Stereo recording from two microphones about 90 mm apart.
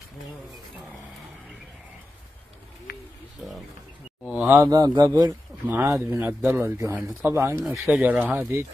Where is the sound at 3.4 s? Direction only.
5° right (ahead or behind).